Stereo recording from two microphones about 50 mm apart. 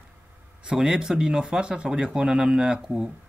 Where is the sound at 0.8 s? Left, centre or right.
Centre.